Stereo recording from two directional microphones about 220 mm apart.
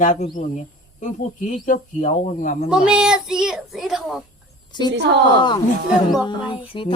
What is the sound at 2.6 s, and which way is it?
A child's voice, 5° right (ahead or behind).